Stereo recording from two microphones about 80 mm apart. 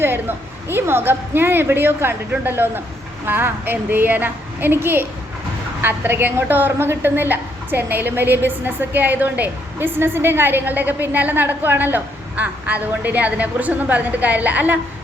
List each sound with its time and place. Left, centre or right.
0.0 s a woman's voice: right